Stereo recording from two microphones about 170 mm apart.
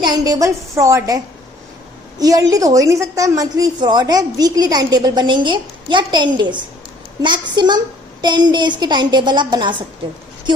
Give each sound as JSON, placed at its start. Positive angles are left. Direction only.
{"t": 0.0, "sound": "a woman's voice", "side_deg": -25}